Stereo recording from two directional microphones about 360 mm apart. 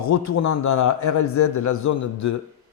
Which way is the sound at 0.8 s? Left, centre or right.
Left.